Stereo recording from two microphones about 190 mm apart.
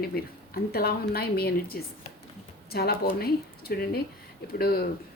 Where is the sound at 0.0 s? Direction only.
55° left (ahead or behind).